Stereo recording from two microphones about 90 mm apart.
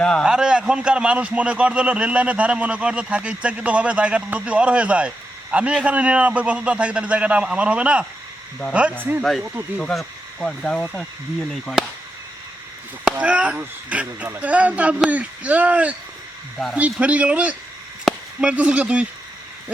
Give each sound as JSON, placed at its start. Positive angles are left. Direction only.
{"t": 0.0, "sound": "speech", "side_deg": 10}
{"t": 0.3, "sound": "a man's voice", "side_deg": -10}
{"t": 9.8, "sound": "speech", "side_deg": 5}
{"t": 13.1, "sound": "a man's voice", "side_deg": -15}